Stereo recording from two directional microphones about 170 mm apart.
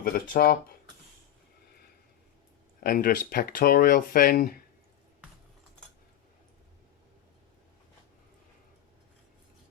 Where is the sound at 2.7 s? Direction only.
60° left (ahead or behind).